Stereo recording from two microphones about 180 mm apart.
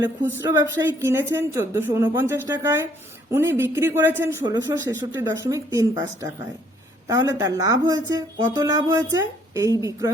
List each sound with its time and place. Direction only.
0.0 s speech: 20° right (ahead or behind)
4.4 s a woman's voice: 20° right (ahead or behind)